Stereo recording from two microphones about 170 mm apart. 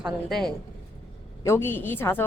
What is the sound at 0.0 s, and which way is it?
Speech, centre (ahead or behind).